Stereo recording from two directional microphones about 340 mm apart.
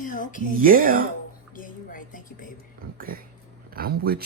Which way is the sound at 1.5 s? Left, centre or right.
Left.